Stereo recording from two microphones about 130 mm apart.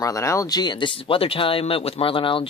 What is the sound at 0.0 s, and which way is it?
Speech, 25° left (ahead or behind).